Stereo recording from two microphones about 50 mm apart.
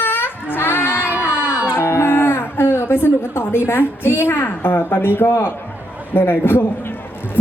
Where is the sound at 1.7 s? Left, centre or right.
Left.